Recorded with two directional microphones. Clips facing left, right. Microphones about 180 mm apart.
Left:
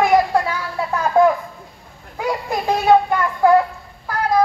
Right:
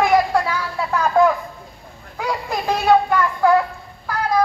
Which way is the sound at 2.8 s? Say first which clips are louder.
Left 1 dB; 20° left (ahead or behind).